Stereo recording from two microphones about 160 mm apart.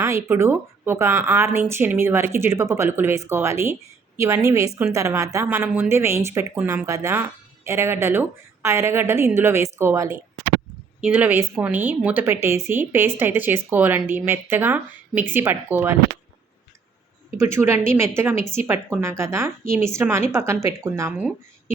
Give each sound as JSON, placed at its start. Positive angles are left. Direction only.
{"t": 0.0, "sound": "a woman's voice", "side_deg": -15}
{"t": 17.3, "sound": "a woman's voice", "side_deg": -15}